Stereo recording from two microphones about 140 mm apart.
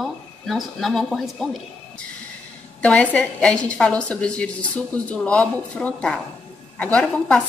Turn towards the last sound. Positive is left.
turn(degrees=10)  # may be behind; listen again after turning